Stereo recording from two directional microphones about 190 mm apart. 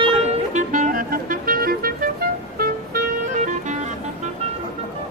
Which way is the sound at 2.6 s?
45° right (ahead or behind).